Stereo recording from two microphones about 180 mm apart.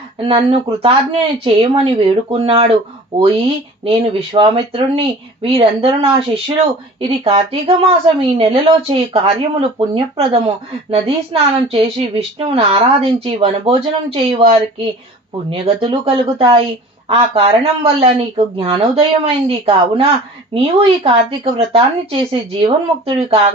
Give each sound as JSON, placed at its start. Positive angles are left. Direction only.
{"t": 0.3, "sound": "speech", "side_deg": -30}
{"t": 3.8, "sound": "speech", "side_deg": -30}